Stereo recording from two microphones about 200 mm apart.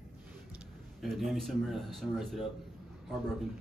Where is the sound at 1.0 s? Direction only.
Centre (ahead or behind).